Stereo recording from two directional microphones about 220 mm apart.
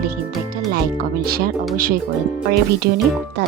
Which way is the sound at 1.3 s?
40° right (ahead or behind).